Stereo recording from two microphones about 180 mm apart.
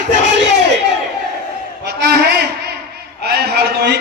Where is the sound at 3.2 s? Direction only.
60° right (ahead or behind).